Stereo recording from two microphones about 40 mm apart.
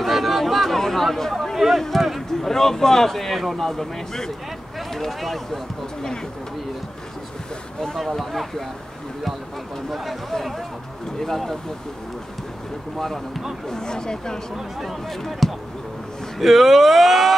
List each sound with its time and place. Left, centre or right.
0.0 s chatter: centre
1.6 s speech: centre
8.0 s speech: centre
9.8 s speech: centre
11.1 s speech: centre
13.7 s speech: centre
14.8 s speech: centre